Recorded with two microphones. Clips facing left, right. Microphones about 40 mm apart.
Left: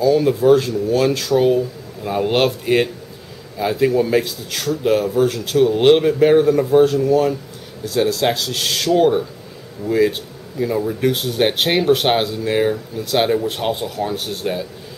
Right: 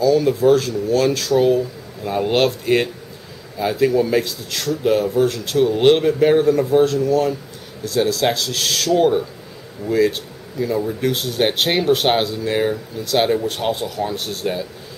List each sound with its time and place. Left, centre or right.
0.0 s speech: centre